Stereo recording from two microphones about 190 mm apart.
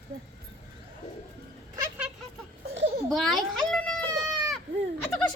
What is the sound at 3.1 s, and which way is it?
Goat, centre (ahead or behind).